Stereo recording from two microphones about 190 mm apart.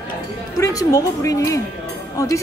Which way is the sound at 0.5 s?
15° left (ahead or behind).